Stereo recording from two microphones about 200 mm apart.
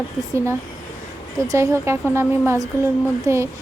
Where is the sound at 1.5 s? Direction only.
15° right (ahead or behind).